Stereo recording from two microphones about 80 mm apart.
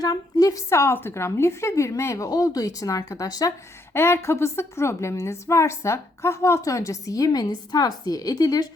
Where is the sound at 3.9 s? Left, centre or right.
Left.